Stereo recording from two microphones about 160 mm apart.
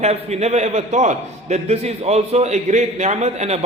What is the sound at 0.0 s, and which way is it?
A man's voice, 45° right (ahead or behind).